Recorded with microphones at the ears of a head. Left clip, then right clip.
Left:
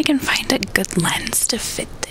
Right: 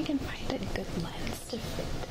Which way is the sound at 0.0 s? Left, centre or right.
Left.